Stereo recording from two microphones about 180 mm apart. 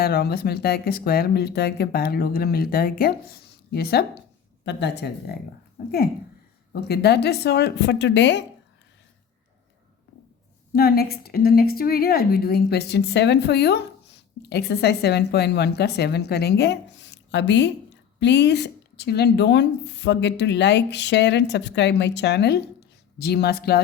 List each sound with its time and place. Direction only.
0.0 s a woman's voice: 60° left (ahead or behind)
4.6 s speech: 75° left (ahead or behind)
6.7 s speech: 65° left (ahead or behind); by 8.4 s 80° left
10.7 s a woman's voice: 60° left (ahead or behind)